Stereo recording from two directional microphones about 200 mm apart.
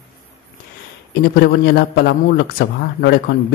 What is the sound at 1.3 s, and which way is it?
A man's voice, 50° left (ahead or behind).